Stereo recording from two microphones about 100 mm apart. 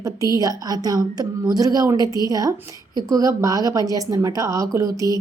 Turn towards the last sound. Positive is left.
turn(degrees=-35)  # may be behind; listen again after turning